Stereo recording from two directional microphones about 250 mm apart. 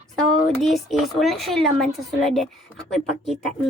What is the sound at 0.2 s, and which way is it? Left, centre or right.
Speech, centre.